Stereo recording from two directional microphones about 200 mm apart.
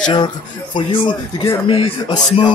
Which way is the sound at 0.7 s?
25° left (ahead or behind).